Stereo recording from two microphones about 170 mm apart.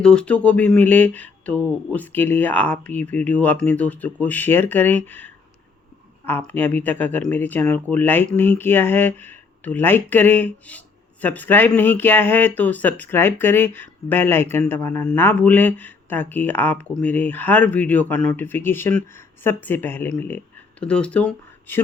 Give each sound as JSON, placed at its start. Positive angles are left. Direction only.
{"t": 0.0, "sound": "speech", "side_deg": 5}